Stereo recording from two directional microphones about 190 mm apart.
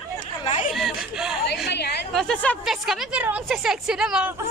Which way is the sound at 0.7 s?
Centre (ahead or behind).